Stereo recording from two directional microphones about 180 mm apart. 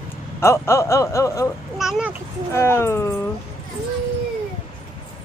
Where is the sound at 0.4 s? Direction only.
15° left (ahead or behind).